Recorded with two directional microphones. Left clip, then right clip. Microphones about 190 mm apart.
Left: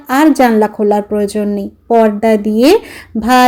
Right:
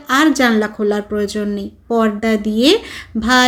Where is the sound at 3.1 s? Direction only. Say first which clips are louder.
Left 3 dB; 25° left (ahead or behind).